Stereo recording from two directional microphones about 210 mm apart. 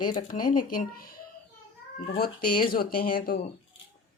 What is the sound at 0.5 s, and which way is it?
Speech, 40° left (ahead or behind).